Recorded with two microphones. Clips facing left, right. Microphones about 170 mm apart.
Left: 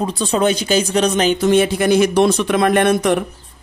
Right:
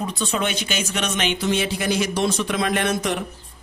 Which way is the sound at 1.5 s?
55° left (ahead or behind).